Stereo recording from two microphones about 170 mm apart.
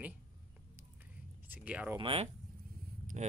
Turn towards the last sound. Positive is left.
turn(degrees=-45)  # may be behind; listen again after turning